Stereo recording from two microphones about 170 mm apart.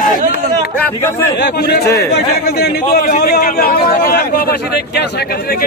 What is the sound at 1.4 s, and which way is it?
A man's voice, 75° left (ahead or behind).